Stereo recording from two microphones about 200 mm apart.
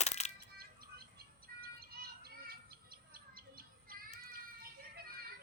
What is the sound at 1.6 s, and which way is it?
Bird, 50° right (ahead or behind).